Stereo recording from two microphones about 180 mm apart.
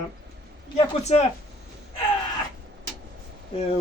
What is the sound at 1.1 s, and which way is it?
Speech, 35° left (ahead or behind).